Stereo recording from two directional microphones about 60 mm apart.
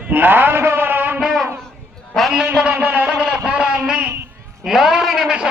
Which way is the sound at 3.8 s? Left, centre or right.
Centre.